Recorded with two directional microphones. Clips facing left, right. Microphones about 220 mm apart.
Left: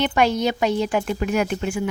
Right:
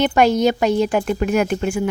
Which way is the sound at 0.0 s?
45° right (ahead or behind).